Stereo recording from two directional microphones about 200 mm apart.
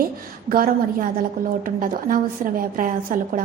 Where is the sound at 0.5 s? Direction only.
45° right (ahead or behind).